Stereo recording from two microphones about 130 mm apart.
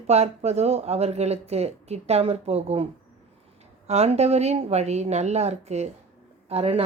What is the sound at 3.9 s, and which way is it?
Speech, 55° right (ahead or behind).